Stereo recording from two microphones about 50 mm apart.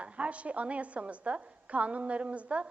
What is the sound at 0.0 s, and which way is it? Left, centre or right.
A woman's voice, right.